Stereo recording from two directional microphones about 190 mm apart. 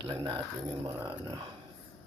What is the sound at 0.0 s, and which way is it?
Speech, 20° right (ahead or behind).